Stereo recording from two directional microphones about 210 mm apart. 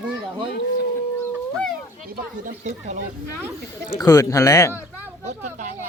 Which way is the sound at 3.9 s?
15° left (ahead or behind).